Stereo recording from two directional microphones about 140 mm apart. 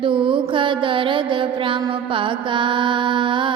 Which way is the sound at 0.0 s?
40° right (ahead or behind).